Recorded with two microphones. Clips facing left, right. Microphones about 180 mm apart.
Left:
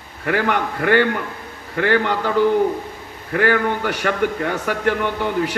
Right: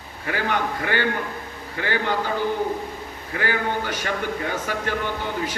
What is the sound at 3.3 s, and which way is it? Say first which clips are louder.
A man's voice: left 7 dB; 60° left (ahead or behind).